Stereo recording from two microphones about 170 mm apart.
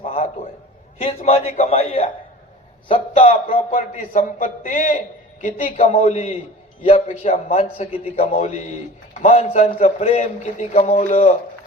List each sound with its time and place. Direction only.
0.0 s a sound: 35° left (ahead or behind)
0.9 s a man's voice: 35° left (ahead or behind)
2.9 s a man's voice: 50° left (ahead or behind)